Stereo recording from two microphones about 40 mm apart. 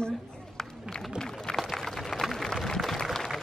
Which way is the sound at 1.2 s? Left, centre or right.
Centre.